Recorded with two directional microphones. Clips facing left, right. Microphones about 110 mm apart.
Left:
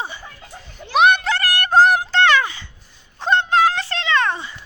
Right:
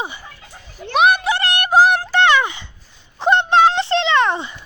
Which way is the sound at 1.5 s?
20° right (ahead or behind).